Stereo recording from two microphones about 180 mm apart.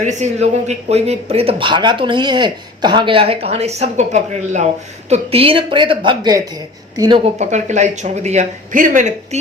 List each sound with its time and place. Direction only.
0.0 s speech: 40° right (ahead or behind); by 7.2 s 20° right (ahead or behind)
7.3 s speech: 40° right (ahead or behind)